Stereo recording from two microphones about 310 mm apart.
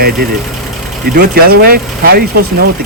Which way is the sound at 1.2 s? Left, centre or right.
Right.